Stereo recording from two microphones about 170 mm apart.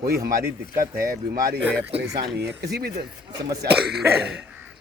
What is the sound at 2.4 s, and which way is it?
Speech, 75° right (ahead or behind).